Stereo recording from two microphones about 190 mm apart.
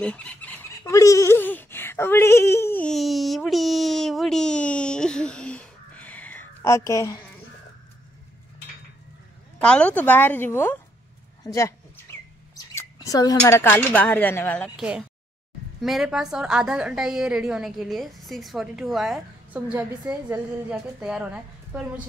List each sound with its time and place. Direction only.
0.0 s a woman's voice: 5° left (ahead or behind)
9.6 s a woman's voice: 5° left (ahead or behind)
14.8 s a woman's voice: 5° right (ahead or behind)